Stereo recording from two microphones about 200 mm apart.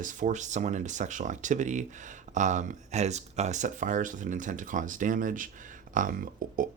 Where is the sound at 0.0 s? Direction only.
40° right (ahead or behind).